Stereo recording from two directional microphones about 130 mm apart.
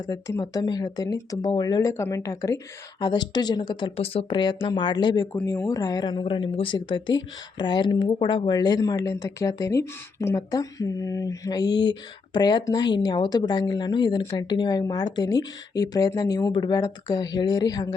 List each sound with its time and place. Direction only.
0.0 s speech: 30° left (ahead or behind)